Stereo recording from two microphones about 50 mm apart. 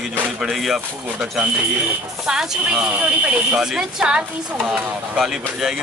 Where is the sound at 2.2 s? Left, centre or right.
Centre.